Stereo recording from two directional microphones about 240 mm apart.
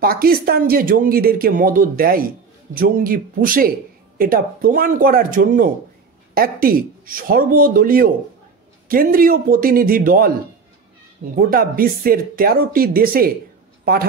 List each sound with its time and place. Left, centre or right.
0.0 s speech: right
11.3 s speech: right